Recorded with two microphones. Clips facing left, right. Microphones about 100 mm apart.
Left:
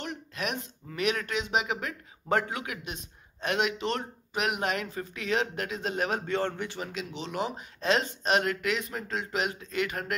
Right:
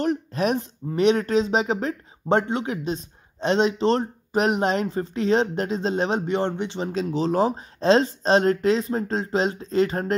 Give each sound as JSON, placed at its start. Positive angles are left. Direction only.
{"t": 0.0, "sound": "speech", "side_deg": -35}
{"t": 6.9, "sound": "speech", "side_deg": -35}